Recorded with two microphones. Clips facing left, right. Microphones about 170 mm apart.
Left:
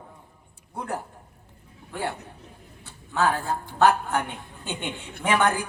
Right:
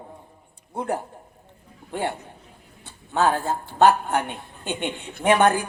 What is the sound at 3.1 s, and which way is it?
A man's voice, 25° right (ahead or behind).